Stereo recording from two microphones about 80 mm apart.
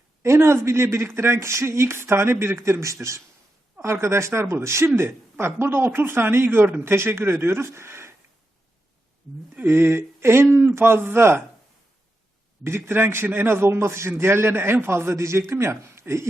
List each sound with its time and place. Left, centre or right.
0.2 s a man's voice: right
9.6 s speech: right
12.6 s a man's voice: right